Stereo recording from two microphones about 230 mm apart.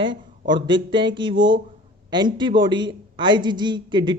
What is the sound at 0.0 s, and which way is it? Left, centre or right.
A man's voice, centre.